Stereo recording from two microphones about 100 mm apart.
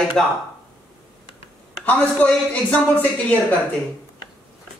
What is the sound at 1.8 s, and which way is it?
Speech, 15° left (ahead or behind).